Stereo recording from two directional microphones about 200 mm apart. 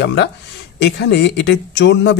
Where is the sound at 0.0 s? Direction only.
55° left (ahead or behind).